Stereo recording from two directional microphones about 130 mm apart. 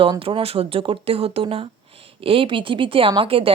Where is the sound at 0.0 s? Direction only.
45° right (ahead or behind).